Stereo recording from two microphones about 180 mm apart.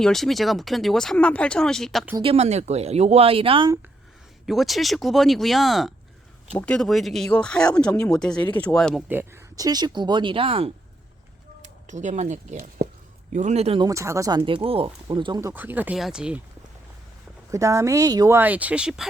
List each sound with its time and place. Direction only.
0.0 s speech: centre (ahead or behind)
2.1 s speech: 30° right (ahead or behind)
4.4 s speech: centre (ahead or behind)
9.0 s speech: 10° right (ahead or behind); by 10.7 s 30° right (ahead or behind)
11.6 s speech: 40° right (ahead or behind)
13.8 s speech: 15° right (ahead or behind)
15.4 s speech: 15° right (ahead or behind)
17.5 s speech: 15° right (ahead or behind)